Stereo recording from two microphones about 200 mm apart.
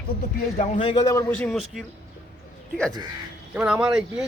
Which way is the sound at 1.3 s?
5° left (ahead or behind).